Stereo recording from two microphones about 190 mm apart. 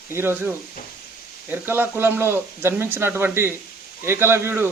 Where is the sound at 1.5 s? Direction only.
10° right (ahead or behind).